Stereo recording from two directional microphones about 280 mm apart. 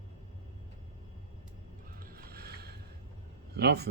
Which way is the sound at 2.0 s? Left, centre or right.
Right.